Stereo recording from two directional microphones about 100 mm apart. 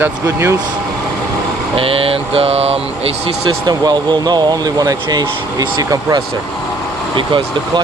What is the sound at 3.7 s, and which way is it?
Speech, 45° right (ahead or behind).